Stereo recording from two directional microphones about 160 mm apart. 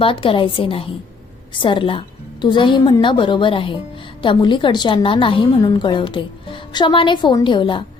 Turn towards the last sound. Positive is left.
turn(degrees=30)  # may be behind; listen again after turning